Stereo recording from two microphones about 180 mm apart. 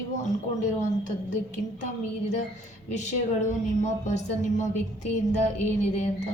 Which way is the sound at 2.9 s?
40° left (ahead or behind).